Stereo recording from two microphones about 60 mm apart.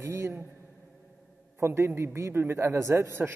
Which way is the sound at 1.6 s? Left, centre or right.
Right.